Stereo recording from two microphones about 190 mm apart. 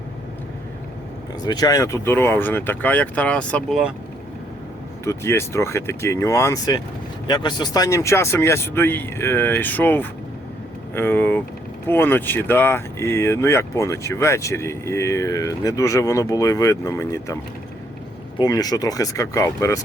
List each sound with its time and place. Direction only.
1.5 s speech: 20° left (ahead or behind); by 3.9 s centre (ahead or behind)
5.0 s speech: 15° left (ahead or behind)